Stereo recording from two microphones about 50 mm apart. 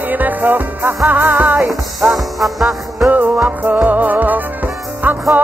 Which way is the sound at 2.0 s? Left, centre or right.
Centre.